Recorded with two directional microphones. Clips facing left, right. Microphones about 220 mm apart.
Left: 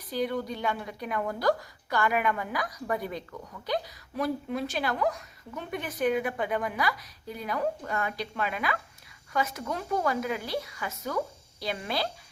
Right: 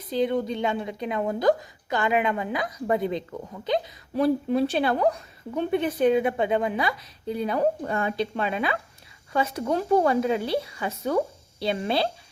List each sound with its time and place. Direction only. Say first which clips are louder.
0.1 s a woman's voice: right 6 dB; 25° right (ahead or behind)